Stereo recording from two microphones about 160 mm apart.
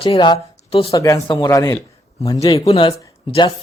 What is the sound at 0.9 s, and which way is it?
Speech, 20° left (ahead or behind).